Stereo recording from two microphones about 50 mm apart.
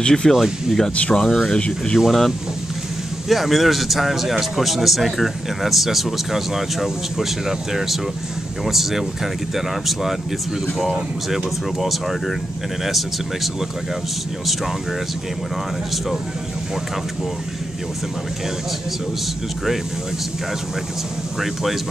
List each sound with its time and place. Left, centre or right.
0.0 s speech: centre
0.3 s a man's voice: centre
0.9 s speech: left
2.0 s a man's voice: centre
10.8 s a man's voice: centre